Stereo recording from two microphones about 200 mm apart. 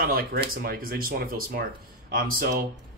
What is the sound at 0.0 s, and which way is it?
Speech, 50° right (ahead or behind).